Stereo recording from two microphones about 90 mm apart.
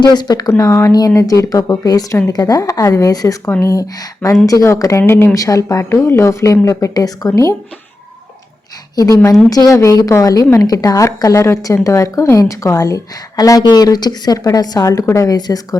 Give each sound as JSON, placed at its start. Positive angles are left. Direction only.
{"t": 0.0, "sound": "speech", "side_deg": 50}
{"t": 0.5, "sound": "speech", "side_deg": 35}
{"t": 1.8, "sound": "speech", "side_deg": 45}
{"t": 5.3, "sound": "speech", "side_deg": 40}
{"t": 5.9, "sound": "speech", "side_deg": 30}
{"t": 9.0, "sound": "speech", "side_deg": 40}
{"t": 9.7, "sound": "speech", "side_deg": 35}